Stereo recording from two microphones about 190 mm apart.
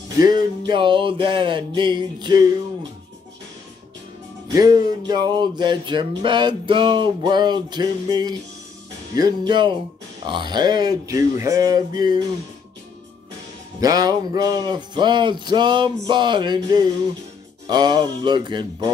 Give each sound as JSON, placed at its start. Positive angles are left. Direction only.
{"t": 0.7, "sound": "music", "side_deg": -25}
{"t": 4.5, "sound": "music", "side_deg": -20}
{"t": 13.7, "sound": "music", "side_deg": -20}